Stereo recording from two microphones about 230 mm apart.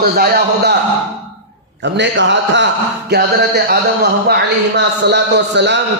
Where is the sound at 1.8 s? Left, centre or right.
Right.